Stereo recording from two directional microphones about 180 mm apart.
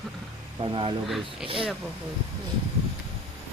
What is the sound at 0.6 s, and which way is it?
Speech, 30° right (ahead or behind).